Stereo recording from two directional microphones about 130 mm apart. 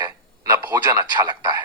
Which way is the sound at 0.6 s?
30° right (ahead or behind).